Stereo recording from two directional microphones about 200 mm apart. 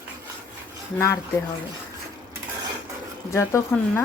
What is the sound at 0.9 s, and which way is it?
Speech, 15° left (ahead or behind).